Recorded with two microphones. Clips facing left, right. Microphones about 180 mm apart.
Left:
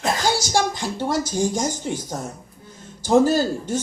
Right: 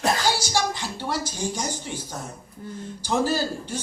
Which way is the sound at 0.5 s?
50° left (ahead or behind).